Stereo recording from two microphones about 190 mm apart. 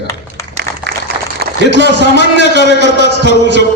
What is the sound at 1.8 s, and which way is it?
Speech, 65° left (ahead or behind).